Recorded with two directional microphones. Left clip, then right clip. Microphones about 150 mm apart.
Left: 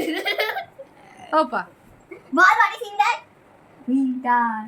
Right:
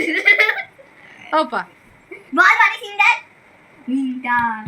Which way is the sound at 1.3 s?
Centre (ahead or behind).